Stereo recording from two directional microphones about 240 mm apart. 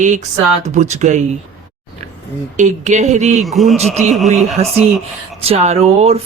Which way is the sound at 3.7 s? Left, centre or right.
Right.